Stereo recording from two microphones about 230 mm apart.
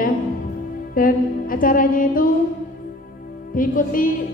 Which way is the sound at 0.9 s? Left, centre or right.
Left.